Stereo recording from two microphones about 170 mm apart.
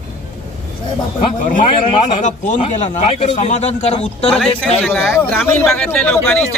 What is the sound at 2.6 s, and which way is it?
A man's voice, 40° left (ahead or behind).